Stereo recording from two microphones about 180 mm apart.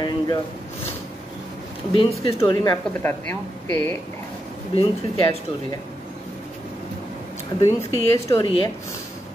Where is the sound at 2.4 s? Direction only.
20° left (ahead or behind).